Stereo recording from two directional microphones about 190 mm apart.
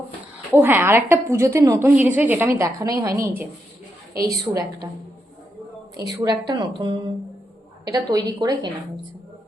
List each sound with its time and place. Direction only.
0.5 s a woman's voice: 10° right (ahead or behind)
6.2 s a woman's voice: 20° right (ahead or behind)